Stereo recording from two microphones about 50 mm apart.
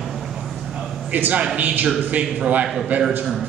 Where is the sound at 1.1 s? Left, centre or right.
Right.